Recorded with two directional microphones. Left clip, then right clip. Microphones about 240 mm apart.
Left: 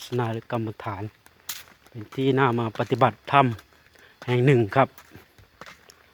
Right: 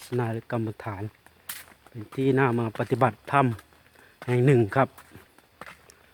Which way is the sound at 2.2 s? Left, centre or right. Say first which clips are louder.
Left 2 dB; centre.